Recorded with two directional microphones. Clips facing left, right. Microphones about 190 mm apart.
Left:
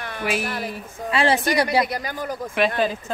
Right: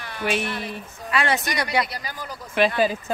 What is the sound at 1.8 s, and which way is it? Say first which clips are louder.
Speech: left 7 dB; 50° left (ahead or behind).